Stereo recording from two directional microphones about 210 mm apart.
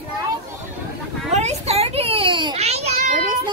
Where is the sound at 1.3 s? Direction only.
30° right (ahead or behind).